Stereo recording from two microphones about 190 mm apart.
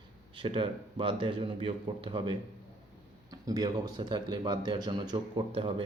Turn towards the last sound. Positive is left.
turn(degrees=-25)  # may be behind; listen again after turning